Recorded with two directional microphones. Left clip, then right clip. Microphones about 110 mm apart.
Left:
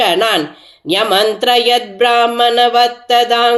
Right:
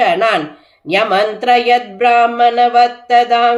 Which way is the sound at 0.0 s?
15° left (ahead or behind).